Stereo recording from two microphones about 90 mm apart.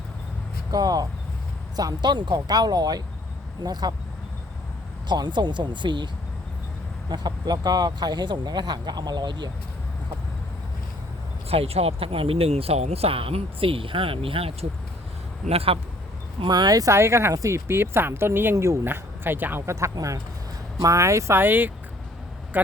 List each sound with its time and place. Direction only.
0.7 s speech: 45° right (ahead or behind)
5.0 s speech: 55° right (ahead or behind)
7.1 s speech: 50° right (ahead or behind)
11.4 s speech: 90° right
15.5 s speech: 90° right
16.5 s speech: 45° right (ahead or behind)
16.9 s speech: 30° right (ahead or behind)